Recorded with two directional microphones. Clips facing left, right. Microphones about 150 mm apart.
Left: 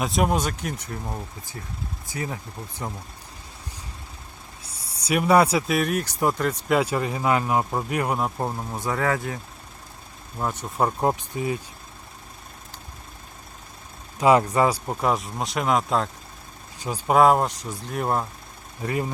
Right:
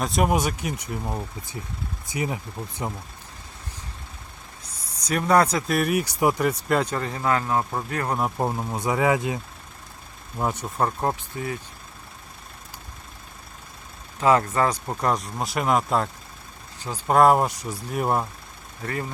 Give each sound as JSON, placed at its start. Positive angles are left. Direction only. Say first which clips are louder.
{"t": 0.0, "sound": "speech", "louder": "right 1 dB", "side_deg": 0}
{"t": 4.6, "sound": "speech", "louder": "left 2 dB", "side_deg": 10}
{"t": 6.7, "sound": "speech", "louder": "left 2 dB", "side_deg": 5}
{"t": 8.4, "sound": "speech", "louder": "right 3 dB", "side_deg": -15}
{"t": 10.8, "sound": "speech", "louder": "left 4 dB", "side_deg": 15}
{"t": 14.2, "sound": "speech", "louder": "left 2 dB", "side_deg": 15}
{"t": 16.8, "sound": "speech", "louder": "even", "side_deg": 10}
{"t": 18.8, "sound": "speech", "louder": "left 4 dB", "side_deg": 15}